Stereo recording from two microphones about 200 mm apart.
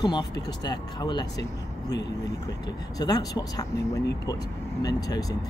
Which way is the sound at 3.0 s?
20° left (ahead or behind).